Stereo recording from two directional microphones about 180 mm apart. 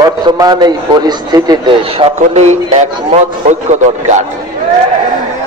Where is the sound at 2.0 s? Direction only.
40° right (ahead or behind).